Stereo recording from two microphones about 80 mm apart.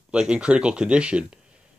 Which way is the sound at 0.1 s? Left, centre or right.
Centre.